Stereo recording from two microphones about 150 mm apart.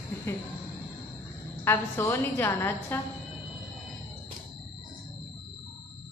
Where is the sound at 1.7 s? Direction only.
15° left (ahead or behind).